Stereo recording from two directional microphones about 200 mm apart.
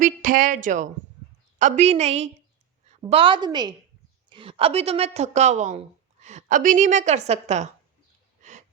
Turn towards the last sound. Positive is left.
turn(degrees=-35)  # may be behind; listen again after turning